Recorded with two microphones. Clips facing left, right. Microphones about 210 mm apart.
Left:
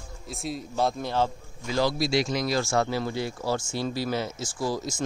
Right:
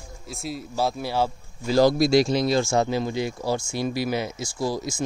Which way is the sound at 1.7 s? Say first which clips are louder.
Right 7 dB; 40° right (ahead or behind).